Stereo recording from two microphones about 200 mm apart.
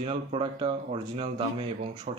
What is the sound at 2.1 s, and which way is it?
Speech, 40° right (ahead or behind).